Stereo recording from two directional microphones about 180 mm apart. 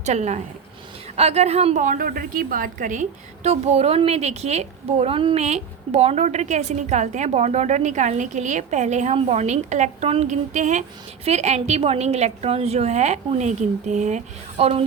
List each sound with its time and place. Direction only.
0.0 s a woman's voice: 40° right (ahead or behind)